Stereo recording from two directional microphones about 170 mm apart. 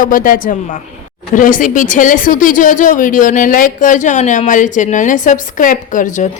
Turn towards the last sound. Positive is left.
turn(degrees=50)  # may be behind; listen again after turning